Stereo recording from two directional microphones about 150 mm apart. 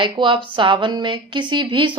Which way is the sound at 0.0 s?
35° right (ahead or behind).